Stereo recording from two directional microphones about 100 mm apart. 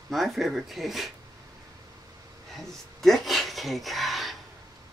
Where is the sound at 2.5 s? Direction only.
Centre (ahead or behind).